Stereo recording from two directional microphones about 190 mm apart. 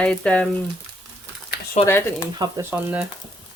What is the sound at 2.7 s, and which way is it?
Speech, 5° right (ahead or behind).